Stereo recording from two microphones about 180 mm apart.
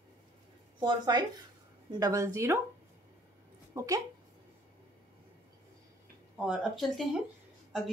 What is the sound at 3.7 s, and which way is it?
Speech, 20° right (ahead or behind).